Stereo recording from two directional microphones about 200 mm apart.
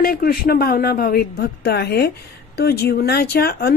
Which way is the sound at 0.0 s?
45° left (ahead or behind).